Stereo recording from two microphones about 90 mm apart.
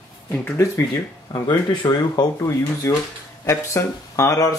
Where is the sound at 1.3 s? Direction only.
55° left (ahead or behind).